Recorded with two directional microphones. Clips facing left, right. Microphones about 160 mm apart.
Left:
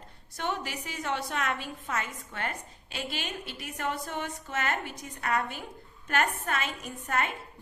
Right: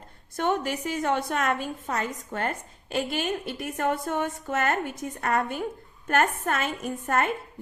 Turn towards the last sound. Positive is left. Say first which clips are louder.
# right 5 dB
turn(degrees=-50)  # may be behind; listen again after turning